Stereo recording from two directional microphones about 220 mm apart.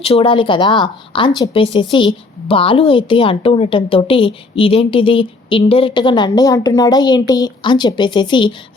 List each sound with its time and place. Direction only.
0.0 s a woman's voice: 25° left (ahead or behind)